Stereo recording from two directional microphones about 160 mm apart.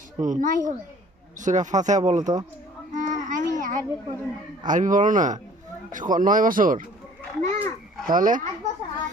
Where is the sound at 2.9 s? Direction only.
55° right (ahead or behind).